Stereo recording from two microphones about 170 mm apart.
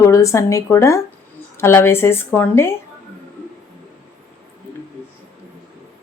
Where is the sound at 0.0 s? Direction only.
20° left (ahead or behind).